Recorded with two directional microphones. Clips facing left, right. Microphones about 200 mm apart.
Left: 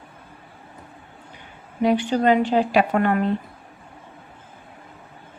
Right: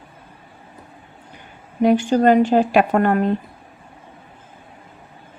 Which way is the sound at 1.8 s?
45° right (ahead or behind).